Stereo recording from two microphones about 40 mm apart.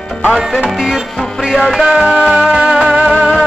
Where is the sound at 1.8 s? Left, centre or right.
Centre.